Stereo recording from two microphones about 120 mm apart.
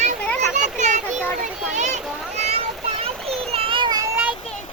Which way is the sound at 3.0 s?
55° right (ahead or behind).